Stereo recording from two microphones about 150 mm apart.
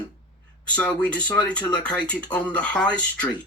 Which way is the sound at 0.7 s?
5° left (ahead or behind).